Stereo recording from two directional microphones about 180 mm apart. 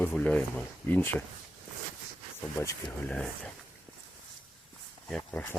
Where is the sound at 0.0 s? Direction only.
10° left (ahead or behind).